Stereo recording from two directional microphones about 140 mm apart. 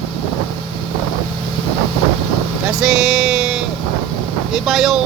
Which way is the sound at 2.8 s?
5° right (ahead or behind).